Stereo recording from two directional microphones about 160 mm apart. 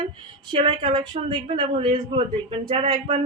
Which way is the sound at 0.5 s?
40° right (ahead or behind).